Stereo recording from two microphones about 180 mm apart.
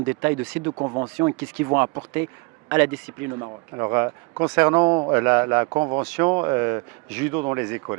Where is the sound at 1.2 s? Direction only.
15° right (ahead or behind).